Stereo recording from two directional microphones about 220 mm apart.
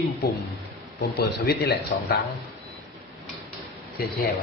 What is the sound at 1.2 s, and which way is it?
Speech, 45° left (ahead or behind).